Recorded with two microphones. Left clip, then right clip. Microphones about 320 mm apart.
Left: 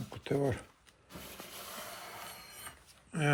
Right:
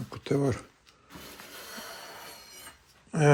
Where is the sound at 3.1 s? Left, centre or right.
Centre.